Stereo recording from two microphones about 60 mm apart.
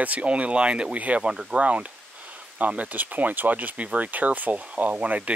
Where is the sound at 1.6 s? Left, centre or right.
Right.